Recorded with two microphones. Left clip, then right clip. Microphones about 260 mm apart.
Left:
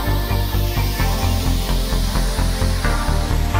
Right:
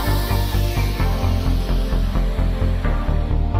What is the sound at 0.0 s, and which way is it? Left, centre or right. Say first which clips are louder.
Music: even; centre.